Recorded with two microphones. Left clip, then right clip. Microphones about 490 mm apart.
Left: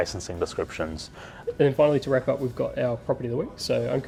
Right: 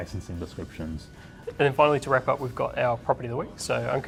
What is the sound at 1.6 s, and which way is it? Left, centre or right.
Speech, right.